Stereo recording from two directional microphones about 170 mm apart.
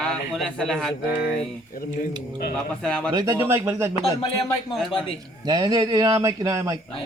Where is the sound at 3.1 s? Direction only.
25° right (ahead or behind).